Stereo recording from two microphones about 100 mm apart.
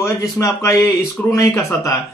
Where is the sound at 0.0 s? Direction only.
30° left (ahead or behind).